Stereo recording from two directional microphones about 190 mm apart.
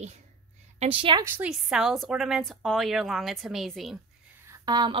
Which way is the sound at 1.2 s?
10° right (ahead or behind).